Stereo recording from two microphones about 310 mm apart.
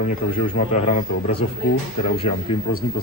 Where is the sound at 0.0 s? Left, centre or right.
Left.